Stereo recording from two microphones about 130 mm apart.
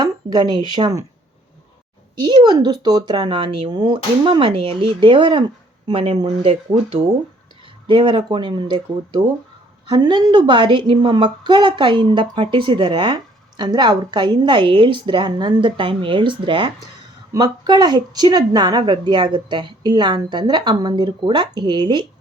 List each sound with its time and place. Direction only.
0.0 s speech: 35° right (ahead or behind)
2.1 s speech: 35° right (ahead or behind)
9.8 s speech: 35° right (ahead or behind)